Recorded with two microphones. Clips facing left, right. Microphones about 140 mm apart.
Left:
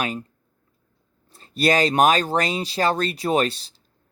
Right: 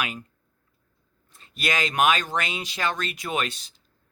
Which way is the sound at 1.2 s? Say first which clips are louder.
Left 9 dB; 35° left (ahead or behind).